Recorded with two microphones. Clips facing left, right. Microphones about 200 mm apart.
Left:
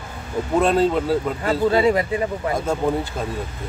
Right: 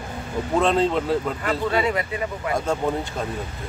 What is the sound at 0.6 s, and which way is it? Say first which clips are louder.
Speech: left 2 dB; 5° left (ahead or behind).